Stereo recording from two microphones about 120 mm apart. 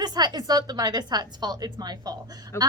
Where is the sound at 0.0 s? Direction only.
35° right (ahead or behind).